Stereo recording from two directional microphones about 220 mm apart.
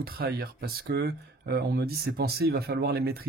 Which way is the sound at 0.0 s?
45° right (ahead or behind).